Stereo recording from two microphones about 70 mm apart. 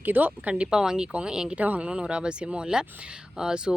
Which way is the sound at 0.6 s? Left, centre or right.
Centre.